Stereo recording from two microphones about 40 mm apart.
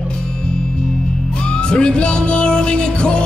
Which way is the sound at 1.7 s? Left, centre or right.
Left.